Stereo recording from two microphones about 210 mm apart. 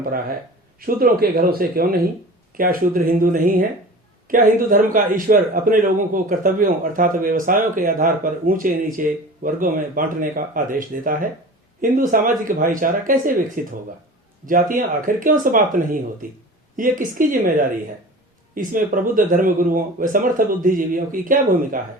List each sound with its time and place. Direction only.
0.0 s a man's voice: 45° right (ahead or behind)